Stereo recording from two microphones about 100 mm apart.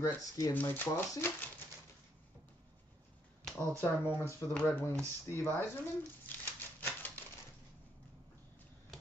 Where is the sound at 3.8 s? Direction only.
15° left (ahead or behind).